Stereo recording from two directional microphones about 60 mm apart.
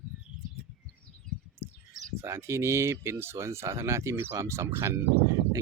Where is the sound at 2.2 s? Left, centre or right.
Right.